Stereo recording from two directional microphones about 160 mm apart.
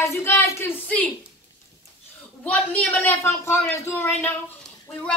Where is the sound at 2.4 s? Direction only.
10° left (ahead or behind).